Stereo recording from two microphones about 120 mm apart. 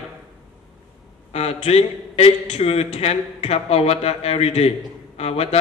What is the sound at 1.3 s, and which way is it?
A man's voice, 60° left (ahead or behind).